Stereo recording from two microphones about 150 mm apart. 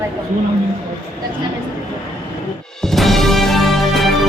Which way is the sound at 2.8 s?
Centre (ahead or behind).